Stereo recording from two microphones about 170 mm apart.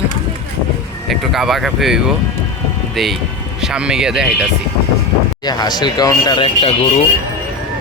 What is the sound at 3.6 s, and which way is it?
Speech, 5° right (ahead or behind).